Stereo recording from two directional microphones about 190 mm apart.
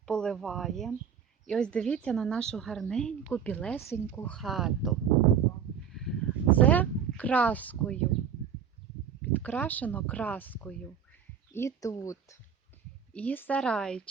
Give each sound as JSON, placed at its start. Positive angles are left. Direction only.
{"t": 0.0, "sound": "a woman's voice", "side_deg": 5}
{"t": 5.9, "sound": "a sound", "side_deg": 0}
{"t": 9.3, "sound": "a woman's voice", "side_deg": 10}